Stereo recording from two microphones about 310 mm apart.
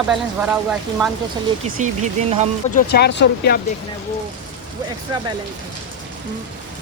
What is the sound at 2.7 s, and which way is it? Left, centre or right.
Speech, left.